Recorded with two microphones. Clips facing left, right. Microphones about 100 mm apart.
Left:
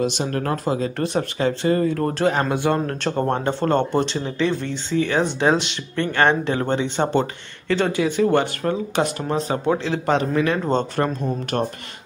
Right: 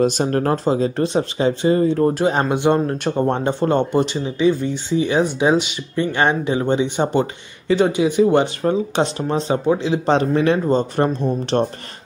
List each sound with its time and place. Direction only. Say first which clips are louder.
0.0 s speech: right 5 dB; 40° right (ahead or behind); by 2.0 s 25° right (ahead or behind)
2.0 s speech: right 3 dB; 10° right (ahead or behind)
2.3 s speech: right 3 dB; 20° right (ahead or behind)